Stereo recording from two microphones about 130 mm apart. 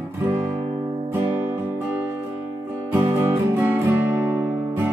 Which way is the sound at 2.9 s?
15° right (ahead or behind).